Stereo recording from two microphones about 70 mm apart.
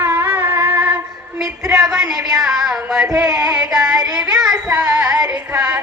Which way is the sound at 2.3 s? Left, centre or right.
Centre.